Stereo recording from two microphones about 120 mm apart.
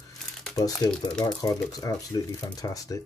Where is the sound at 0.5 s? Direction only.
35° left (ahead or behind).